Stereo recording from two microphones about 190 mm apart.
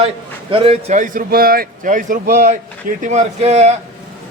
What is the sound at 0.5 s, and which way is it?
Speech, 30° right (ahead or behind).